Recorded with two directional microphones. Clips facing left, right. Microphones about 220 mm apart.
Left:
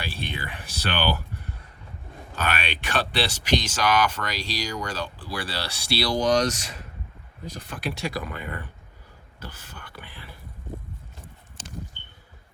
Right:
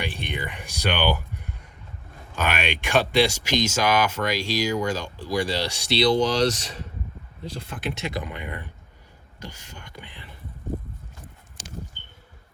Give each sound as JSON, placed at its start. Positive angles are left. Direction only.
{"t": 0.0, "sound": "a sound", "side_deg": -15}
{"t": 2.3, "sound": "speech", "side_deg": -10}
{"t": 6.4, "sound": "speech", "side_deg": -30}